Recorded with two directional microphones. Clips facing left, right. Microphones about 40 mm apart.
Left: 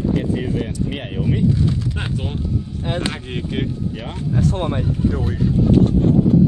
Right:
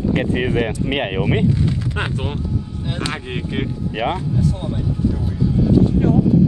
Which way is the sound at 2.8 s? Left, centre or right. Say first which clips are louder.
Left 3 dB; left.